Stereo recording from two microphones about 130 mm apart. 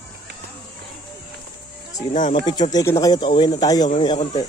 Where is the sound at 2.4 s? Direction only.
35° left (ahead or behind).